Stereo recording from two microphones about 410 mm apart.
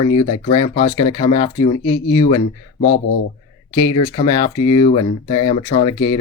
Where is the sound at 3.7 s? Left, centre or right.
Centre.